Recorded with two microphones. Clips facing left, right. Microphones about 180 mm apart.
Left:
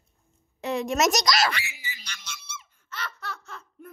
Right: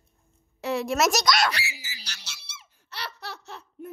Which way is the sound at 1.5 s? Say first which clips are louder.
Even; 40° right (ahead or behind).